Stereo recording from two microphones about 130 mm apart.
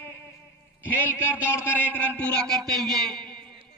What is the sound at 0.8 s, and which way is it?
A man's voice, 15° left (ahead or behind).